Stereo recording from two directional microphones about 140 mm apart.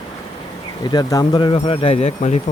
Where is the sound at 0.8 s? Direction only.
30° left (ahead or behind); by 2.4 s 55° left (ahead or behind).